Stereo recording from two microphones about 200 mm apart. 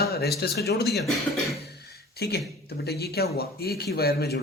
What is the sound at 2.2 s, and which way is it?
A man's voice, 55° left (ahead or behind).